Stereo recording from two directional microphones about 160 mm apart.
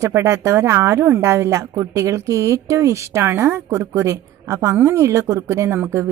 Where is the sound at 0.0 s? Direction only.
15° right (ahead or behind).